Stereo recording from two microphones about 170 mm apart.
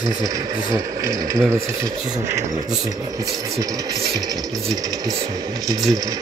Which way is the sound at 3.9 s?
35° right (ahead or behind).